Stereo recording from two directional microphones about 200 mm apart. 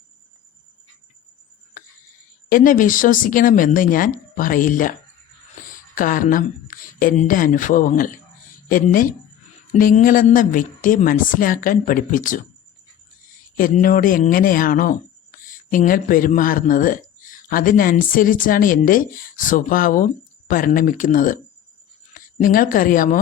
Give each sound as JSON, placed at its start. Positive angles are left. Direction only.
{"t": 2.5, "sound": "speech", "side_deg": 40}
{"t": 13.6, "sound": "speech", "side_deg": 45}